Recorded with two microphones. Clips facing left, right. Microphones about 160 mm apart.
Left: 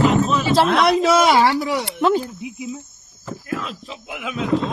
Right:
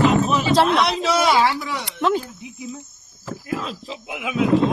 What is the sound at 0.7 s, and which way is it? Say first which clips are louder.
Speech: left 4 dB; 55° left (ahead or behind).